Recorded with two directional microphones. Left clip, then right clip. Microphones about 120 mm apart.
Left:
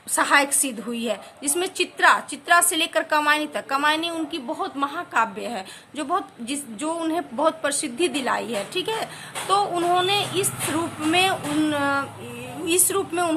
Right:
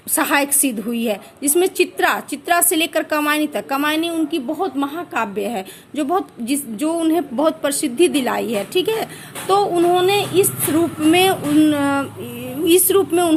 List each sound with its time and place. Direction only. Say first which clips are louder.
0.2 s a woman's voice: right 1 dB; 45° right (ahead or behind)